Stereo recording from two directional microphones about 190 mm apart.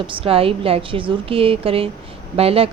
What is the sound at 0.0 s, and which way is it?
A woman's voice, 25° right (ahead or behind).